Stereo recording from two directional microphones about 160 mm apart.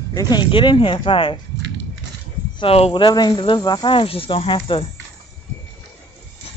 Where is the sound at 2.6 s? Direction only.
35° left (ahead or behind).